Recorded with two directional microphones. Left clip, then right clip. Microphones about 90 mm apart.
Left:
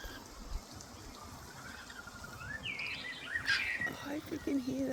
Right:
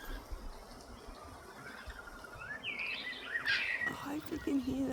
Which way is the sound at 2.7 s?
45° right (ahead or behind).